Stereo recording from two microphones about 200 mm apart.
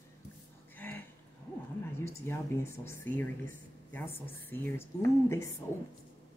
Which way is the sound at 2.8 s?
10° left (ahead or behind).